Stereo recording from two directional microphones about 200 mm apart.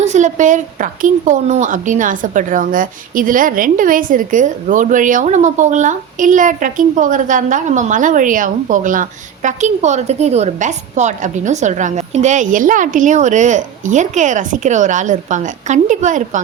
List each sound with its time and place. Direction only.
0.0 s a woman's voice: 35° right (ahead or behind)